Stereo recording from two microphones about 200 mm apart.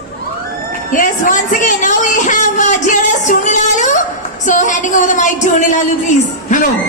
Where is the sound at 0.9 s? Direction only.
40° left (ahead or behind).